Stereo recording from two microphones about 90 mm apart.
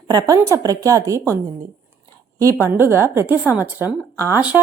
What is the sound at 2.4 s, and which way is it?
Speech, 30° right (ahead or behind).